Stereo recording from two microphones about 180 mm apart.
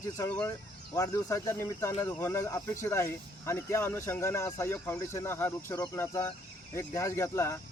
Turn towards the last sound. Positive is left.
turn(degrees=15)  # may be behind; listen again after turning